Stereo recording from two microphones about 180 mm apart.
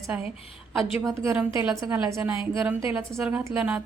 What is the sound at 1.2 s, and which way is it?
A woman's voice, 10° right (ahead or behind).